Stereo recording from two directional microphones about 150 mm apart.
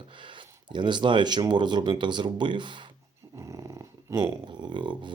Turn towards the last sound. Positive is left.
turn(degrees=-30)  # may be behind; listen again after turning